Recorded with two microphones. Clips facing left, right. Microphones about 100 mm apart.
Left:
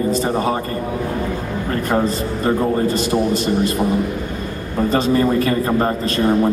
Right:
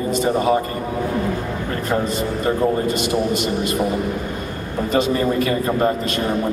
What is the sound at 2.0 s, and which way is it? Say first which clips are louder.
Speech: left 2 dB; 35° left (ahead or behind).